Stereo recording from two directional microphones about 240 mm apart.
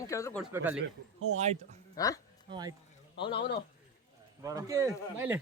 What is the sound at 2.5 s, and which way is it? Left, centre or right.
Speech, centre.